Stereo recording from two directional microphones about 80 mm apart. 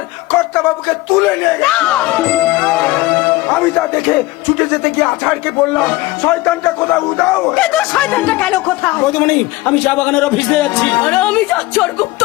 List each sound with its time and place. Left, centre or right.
0.3 s speech: centre